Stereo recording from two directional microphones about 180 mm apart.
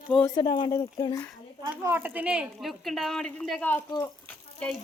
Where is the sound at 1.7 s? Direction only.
10° right (ahead or behind).